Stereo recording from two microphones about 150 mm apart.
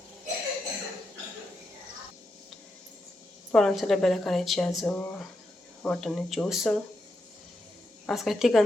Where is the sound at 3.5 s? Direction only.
Centre (ahead or behind).